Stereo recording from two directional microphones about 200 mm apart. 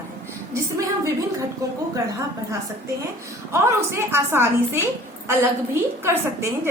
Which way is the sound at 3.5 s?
15° right (ahead or behind).